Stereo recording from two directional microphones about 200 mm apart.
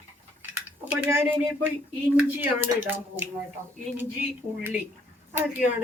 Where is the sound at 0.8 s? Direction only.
10° right (ahead or behind).